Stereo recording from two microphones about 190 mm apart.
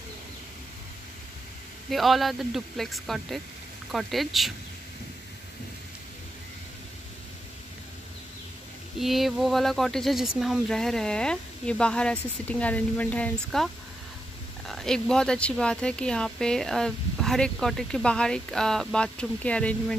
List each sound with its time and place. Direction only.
1.9 s speech: centre (ahead or behind)
9.0 s speech: centre (ahead or behind)
14.7 s speech: 5° left (ahead or behind)